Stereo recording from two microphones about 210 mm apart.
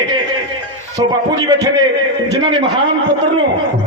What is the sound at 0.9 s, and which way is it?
A man's voice, 20° right (ahead or behind).